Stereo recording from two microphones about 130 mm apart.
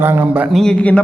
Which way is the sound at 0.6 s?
5° left (ahead or behind).